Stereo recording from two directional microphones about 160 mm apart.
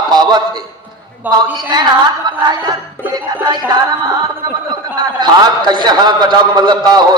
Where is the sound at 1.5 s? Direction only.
25° right (ahead or behind).